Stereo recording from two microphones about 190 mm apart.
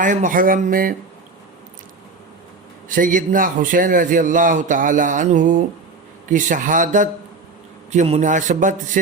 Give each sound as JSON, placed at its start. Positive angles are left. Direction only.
{"t": 0.0, "sound": "a man's voice", "side_deg": -45}
{"t": 2.9, "sound": "a man's voice", "side_deg": -45}